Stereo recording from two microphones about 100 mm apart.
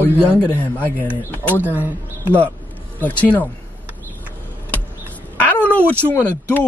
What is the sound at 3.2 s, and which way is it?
Speech, 15° left (ahead or behind).